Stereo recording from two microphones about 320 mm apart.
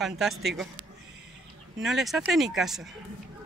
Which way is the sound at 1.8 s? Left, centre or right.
Centre.